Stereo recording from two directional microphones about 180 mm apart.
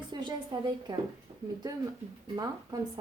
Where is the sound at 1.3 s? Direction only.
30° right (ahead or behind).